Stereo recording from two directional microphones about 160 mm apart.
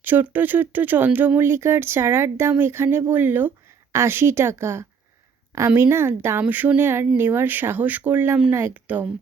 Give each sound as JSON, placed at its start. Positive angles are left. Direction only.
{"t": 0.0, "sound": "speech", "side_deg": -10}